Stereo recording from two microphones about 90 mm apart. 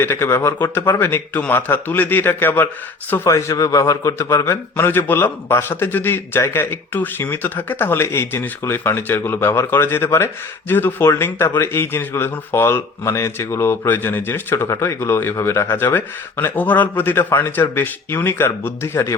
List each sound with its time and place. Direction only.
0.0 s speech: 25° left (ahead or behind)
3.2 s a man's voice: 35° left (ahead or behind)